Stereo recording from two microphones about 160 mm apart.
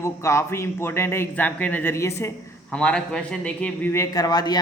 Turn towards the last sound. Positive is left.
turn(degrees=25)  # may be behind; listen again after turning